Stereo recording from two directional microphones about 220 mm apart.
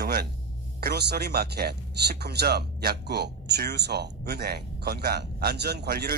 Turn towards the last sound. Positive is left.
turn(degrees=-45)  # may be behind; listen again after turning